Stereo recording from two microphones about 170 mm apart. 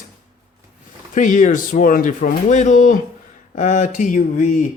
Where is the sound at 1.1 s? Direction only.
50° left (ahead or behind).